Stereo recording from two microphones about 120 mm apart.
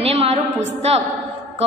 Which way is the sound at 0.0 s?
55° right (ahead or behind).